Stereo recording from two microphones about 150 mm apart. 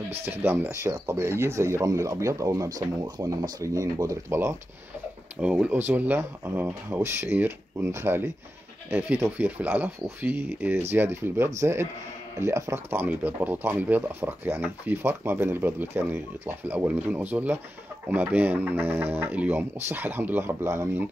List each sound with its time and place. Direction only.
0.2 s speech: 15° right (ahead or behind)